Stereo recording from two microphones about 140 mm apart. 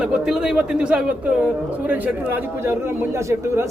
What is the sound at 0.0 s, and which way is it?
A woman's voice, 5° right (ahead or behind).